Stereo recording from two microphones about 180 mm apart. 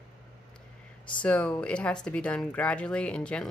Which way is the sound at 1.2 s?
5° left (ahead or behind).